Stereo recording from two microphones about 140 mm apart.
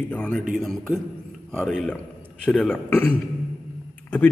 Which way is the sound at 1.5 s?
5° left (ahead or behind).